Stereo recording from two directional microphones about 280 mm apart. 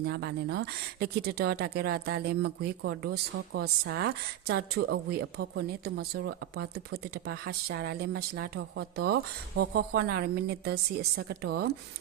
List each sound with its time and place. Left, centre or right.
0.0 s speech: right